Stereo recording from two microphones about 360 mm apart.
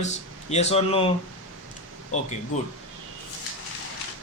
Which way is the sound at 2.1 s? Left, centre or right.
Centre.